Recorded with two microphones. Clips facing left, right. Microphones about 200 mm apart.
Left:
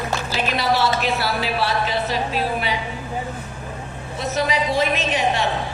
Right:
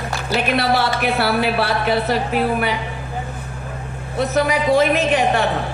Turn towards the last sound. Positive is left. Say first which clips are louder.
# right 4 dB
turn(degrees=-55)  # may be behind; listen again after turning